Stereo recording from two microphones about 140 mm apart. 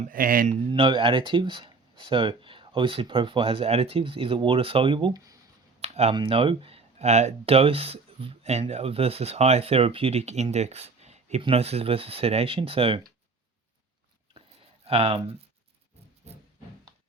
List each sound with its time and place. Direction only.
0.1 s speech: 90° right
0.7 s speech: 35° right (ahead or behind)
5.8 s a sound: 50° right (ahead or behind)
6.1 s speech: 40° right (ahead or behind)
14.8 s speech: 45° right (ahead or behind)